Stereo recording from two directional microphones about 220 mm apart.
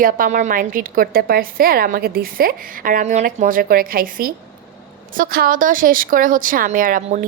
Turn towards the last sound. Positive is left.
turn(degrees=-40)  # may be behind; listen again after turning